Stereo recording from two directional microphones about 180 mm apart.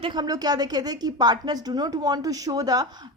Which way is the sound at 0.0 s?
25° right (ahead or behind).